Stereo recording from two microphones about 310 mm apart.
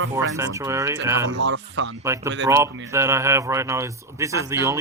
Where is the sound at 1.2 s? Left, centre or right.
Right.